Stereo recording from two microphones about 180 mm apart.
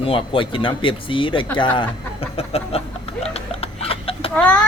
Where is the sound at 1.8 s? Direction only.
35° left (ahead or behind).